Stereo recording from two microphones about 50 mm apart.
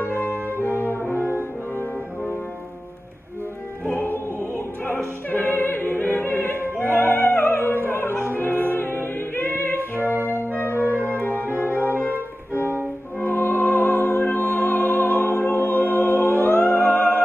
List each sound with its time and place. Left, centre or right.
0.0 s brass instrument: left
1.1 s brass instrument: right
3.8 s music: left
6.8 s opera: left
8.7 s music: left
11.1 s music: left
11.9 s music: right
13.2 s music: left